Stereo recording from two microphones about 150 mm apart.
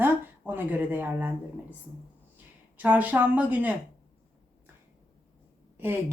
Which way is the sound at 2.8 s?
10° right (ahead or behind).